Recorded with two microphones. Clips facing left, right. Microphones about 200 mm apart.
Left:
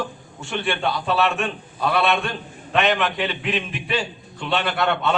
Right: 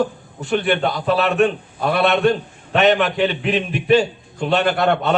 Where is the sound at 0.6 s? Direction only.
40° right (ahead or behind).